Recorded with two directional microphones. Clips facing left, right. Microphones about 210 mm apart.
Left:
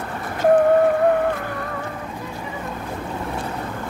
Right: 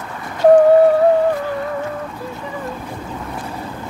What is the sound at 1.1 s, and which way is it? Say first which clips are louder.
Music: right 5 dB; 55° left (ahead or behind).